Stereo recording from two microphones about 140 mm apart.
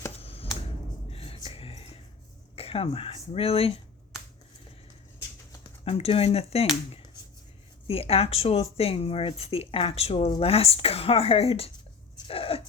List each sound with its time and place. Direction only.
0.2 s a sound: 45° left (ahead or behind)
1.1 s whispering: 45° left (ahead or behind)
2.6 s speech: 45° left (ahead or behind)
5.8 s speech: 45° left (ahead or behind)
7.9 s speech: 45° left (ahead or behind)
12.3 s a sound: 45° left (ahead or behind)